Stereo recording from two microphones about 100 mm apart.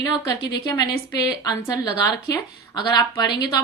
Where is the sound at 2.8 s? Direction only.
45° left (ahead or behind).